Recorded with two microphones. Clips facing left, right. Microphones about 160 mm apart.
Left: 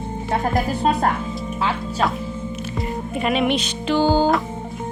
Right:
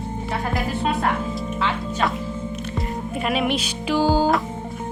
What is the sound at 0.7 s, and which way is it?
Speech, 40° left (ahead or behind).